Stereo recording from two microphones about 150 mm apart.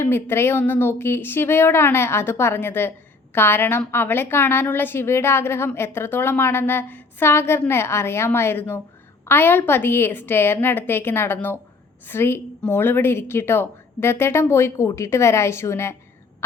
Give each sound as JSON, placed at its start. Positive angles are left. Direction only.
{"t": 0.0, "sound": "a woman's voice", "side_deg": 15}